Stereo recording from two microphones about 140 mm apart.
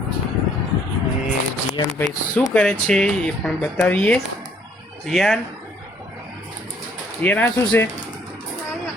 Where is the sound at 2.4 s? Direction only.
5° left (ahead or behind).